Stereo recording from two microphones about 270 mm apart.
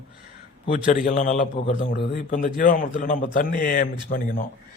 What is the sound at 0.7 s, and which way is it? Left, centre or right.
A man's voice, left.